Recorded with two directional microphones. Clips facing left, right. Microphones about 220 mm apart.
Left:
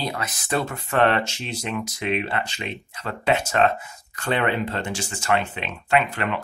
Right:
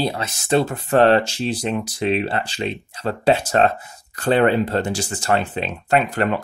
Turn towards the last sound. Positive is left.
turn(degrees=-40)  # may be behind; listen again after turning